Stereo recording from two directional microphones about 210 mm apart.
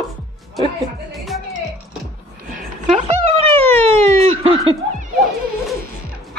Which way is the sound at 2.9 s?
30° right (ahead or behind).